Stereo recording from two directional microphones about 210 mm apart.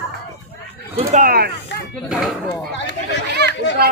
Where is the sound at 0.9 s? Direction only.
40° right (ahead or behind).